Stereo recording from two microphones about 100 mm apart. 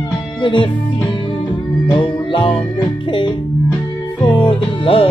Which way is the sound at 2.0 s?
55° left (ahead or behind).